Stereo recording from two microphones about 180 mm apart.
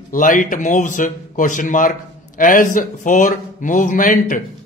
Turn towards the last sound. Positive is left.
turn(degrees=45)  # may be behind; listen again after turning